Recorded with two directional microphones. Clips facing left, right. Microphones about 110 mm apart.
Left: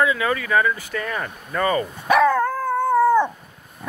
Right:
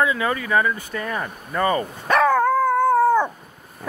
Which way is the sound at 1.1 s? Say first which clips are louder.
Right 1 dB; 5° right (ahead or behind).